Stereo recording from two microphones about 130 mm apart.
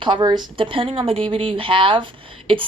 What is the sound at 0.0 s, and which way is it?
A woman's voice, 35° right (ahead or behind).